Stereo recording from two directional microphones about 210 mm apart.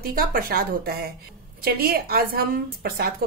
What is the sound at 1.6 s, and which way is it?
A woman's voice, 45° right (ahead or behind).